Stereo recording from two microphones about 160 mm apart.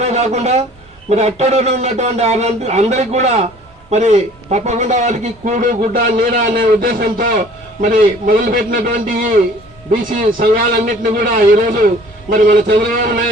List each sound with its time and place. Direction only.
0.0 s a man's voice: 45° right (ahead or behind)
12.6 s a man's voice: 65° right (ahead or behind)